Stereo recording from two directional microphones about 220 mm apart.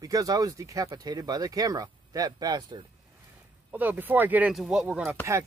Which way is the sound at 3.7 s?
10° right (ahead or behind).